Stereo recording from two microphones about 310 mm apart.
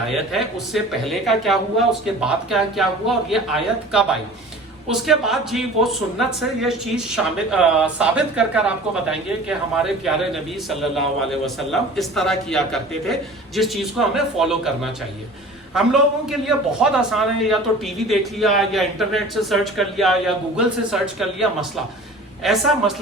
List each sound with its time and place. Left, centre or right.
0.3 s a man's voice: centre